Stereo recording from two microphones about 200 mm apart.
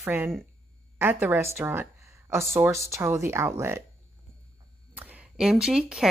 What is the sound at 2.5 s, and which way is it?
Speech, 15° right (ahead or behind).